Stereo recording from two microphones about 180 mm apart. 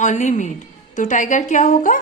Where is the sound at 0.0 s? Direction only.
40° left (ahead or behind).